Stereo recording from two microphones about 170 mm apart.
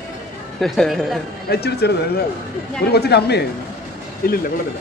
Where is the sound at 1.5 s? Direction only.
75° left (ahead or behind).